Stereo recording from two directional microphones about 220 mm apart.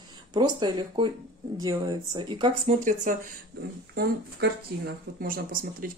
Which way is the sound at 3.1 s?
35° right (ahead or behind).